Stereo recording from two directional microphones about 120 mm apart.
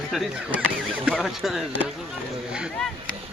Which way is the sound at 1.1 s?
Centre (ahead or behind).